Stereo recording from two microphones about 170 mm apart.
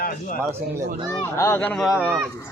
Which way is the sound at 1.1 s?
15° left (ahead or behind).